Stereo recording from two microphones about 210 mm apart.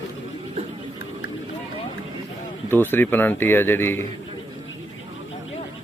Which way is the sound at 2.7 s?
10° left (ahead or behind).